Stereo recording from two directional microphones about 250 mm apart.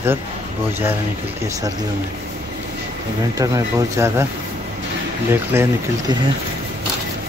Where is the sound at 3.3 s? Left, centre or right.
Centre.